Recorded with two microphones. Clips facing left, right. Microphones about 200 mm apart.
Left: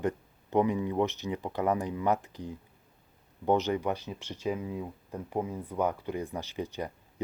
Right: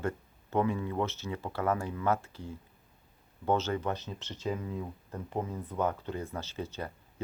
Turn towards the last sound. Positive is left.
turn(degrees=15)  # may be behind; listen again after turning